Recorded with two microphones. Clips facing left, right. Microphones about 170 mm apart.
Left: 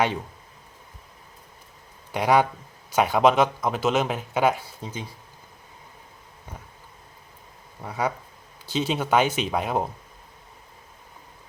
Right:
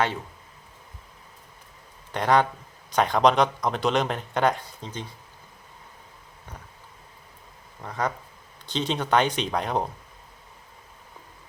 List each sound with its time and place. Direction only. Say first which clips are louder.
2.1 s speech: left 1 dB; 10° left (ahead or behind)
7.8 s speech: left 1 dB; 10° left (ahead or behind)